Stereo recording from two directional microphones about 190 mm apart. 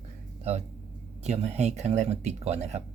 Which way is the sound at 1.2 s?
35° right (ahead or behind).